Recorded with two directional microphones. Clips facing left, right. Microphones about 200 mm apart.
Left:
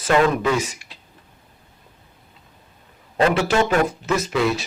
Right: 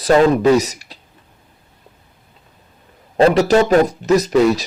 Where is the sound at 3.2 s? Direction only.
40° right (ahead or behind).